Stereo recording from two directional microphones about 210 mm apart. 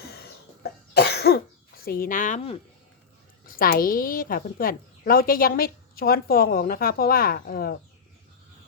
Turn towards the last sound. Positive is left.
turn(degrees=45)  # may be behind; listen again after turning